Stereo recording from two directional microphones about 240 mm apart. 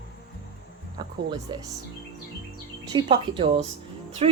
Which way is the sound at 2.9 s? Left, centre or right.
Right.